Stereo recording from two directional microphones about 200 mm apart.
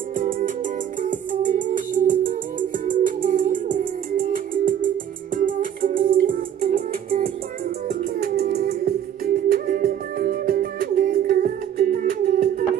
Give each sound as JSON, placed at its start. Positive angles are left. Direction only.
{"t": 0.1, "sound": "music", "side_deg": -45}